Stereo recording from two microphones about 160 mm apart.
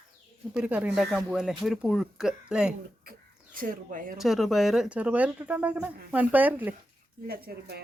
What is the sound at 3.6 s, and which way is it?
Speech, 60° right (ahead or behind).